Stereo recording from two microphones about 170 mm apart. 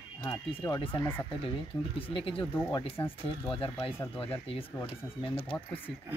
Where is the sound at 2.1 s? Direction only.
30° left (ahead or behind).